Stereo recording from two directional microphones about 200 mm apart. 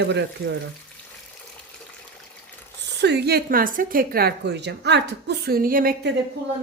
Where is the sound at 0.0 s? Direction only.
60° right (ahead or behind).